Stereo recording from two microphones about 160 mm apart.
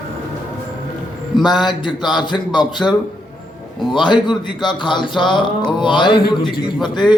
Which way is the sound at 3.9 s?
30° left (ahead or behind).